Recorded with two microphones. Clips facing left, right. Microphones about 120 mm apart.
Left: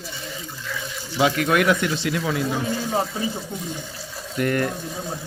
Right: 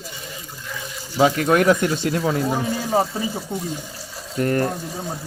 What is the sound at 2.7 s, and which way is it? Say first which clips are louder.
Speech: right 3 dB; 10° right (ahead or behind).